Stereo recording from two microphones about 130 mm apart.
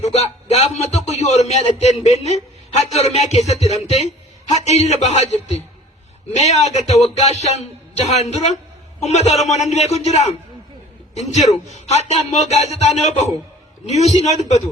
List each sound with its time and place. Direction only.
0.0 s a man's voice: 55° left (ahead or behind)